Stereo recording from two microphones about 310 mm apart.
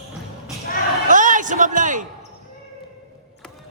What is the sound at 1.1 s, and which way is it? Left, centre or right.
Speech, right.